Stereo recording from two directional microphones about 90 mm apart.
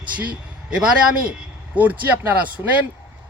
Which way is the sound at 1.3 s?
15° right (ahead or behind).